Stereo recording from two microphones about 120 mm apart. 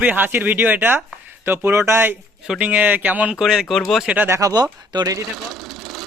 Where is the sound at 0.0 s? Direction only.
15° right (ahead or behind).